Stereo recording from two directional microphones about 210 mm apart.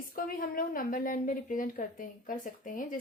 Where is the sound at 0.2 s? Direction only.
40° left (ahead or behind).